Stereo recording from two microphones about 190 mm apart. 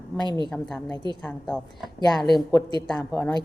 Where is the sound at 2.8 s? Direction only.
5° left (ahead or behind).